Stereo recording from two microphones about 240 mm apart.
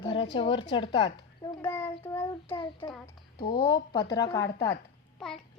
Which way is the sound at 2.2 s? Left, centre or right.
Left.